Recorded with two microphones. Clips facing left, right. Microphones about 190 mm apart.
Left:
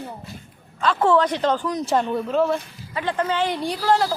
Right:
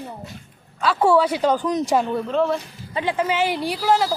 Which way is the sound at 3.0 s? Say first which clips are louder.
Right 1 dB; 10° right (ahead or behind).